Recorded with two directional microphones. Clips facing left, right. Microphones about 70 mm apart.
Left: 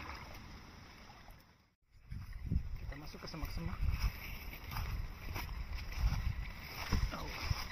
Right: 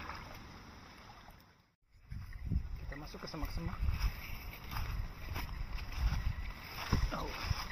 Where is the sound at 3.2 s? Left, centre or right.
Right.